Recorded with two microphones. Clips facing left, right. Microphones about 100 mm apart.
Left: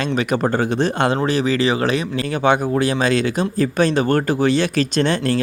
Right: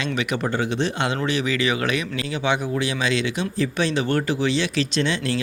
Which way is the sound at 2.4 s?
45° left (ahead or behind).